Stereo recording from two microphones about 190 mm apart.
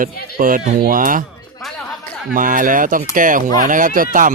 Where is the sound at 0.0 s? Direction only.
45° right (ahead or behind).